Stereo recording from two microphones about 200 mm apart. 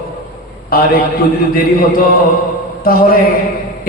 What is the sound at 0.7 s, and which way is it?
Speech, 45° left (ahead or behind).